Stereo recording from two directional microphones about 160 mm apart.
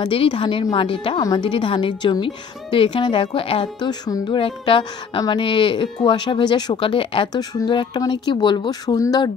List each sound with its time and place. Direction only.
0.0 s a woman's voice: 30° left (ahead or behind)